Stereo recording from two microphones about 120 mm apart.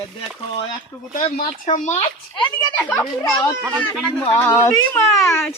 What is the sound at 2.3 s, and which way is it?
Speech, 40° left (ahead or behind).